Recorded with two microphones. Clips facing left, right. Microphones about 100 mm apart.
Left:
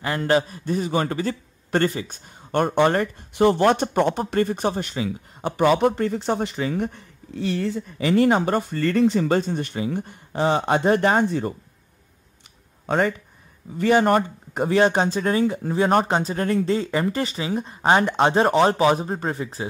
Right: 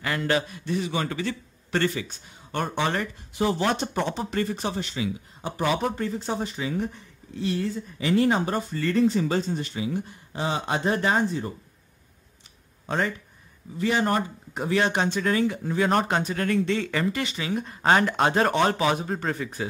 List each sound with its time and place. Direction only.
0.2 s a man's voice: 40° left (ahead or behind)
5.4 s speech: 60° left (ahead or behind)
12.8 s a man's voice: 55° left (ahead or behind)
14.7 s speech: 35° left (ahead or behind)